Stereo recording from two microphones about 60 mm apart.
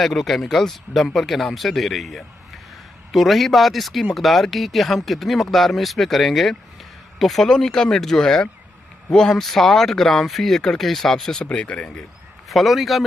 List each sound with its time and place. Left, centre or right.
0.0 s speech: centre
11.4 s speech: left
12.4 s speech: centre